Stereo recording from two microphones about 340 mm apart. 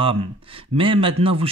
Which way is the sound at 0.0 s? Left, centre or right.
Centre.